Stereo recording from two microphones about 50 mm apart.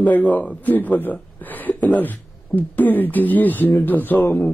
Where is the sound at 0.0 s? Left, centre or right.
Left.